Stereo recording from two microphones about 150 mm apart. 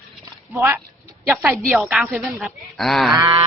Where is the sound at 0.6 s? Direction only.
15° right (ahead or behind).